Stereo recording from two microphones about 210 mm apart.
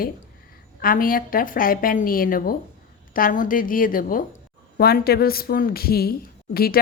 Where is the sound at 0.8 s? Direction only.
40° left (ahead or behind).